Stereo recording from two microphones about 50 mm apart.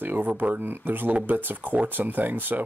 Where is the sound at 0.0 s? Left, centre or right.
Right.